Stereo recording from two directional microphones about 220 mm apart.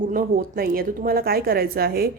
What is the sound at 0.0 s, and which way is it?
A woman's voice, 40° right (ahead or behind).